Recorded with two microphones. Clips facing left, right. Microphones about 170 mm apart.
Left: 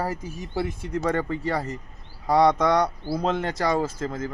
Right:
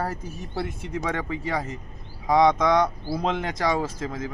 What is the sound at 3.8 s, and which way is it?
Speech, 5° right (ahead or behind).